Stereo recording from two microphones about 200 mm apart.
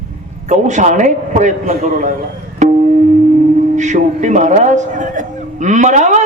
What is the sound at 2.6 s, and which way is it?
Music, 35° right (ahead or behind).